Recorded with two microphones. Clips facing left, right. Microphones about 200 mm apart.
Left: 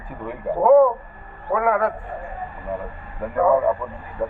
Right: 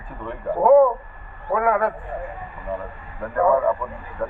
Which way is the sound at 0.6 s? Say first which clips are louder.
Even; 5° right (ahead or behind).